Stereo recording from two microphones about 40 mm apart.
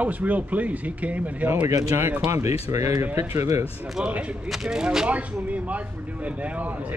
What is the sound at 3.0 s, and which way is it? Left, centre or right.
Speech, right.